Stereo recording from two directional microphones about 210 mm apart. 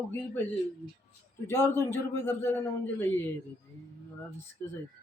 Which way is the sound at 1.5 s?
10° left (ahead or behind).